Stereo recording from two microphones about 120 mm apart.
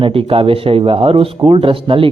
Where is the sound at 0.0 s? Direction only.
50° right (ahead or behind).